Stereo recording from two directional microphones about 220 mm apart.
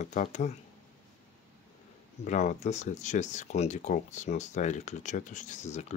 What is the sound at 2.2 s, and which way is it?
Speech, 35° left (ahead or behind).